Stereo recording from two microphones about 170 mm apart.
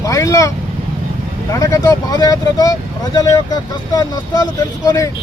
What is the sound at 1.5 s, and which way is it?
Speech, 20° left (ahead or behind).